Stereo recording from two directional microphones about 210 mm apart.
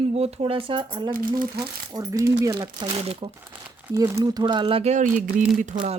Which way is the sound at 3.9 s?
15° right (ahead or behind).